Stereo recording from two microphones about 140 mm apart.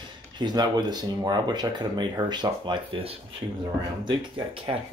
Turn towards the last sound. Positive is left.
turn(degrees=-40)  # may be behind; listen again after turning